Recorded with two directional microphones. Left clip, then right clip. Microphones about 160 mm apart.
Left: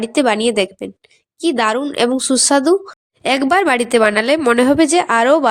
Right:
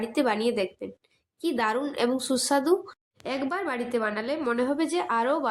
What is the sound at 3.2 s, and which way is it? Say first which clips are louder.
A woman's voice: left 16 dB; 65° left (ahead or behind).